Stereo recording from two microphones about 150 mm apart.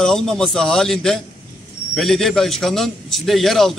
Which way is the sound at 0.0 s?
5° left (ahead or behind).